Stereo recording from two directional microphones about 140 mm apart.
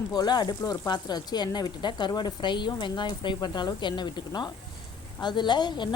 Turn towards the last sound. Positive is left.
turn(degrees=35)  # may be behind; listen again after turning